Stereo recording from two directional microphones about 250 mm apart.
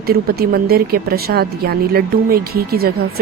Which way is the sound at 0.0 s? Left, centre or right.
Right.